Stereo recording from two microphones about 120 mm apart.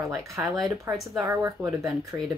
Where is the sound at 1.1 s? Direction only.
25° right (ahead or behind).